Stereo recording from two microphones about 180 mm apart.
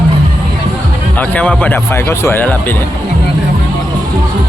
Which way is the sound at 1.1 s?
10° left (ahead or behind).